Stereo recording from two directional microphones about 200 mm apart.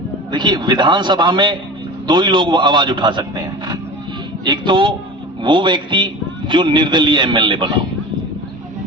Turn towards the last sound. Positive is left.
turn(degrees=-25)  # may be behind; listen again after turning